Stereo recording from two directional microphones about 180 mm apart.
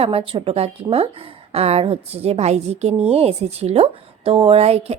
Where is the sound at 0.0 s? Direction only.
30° right (ahead or behind).